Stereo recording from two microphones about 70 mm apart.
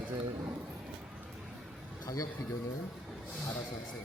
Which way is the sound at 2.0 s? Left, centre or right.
Left.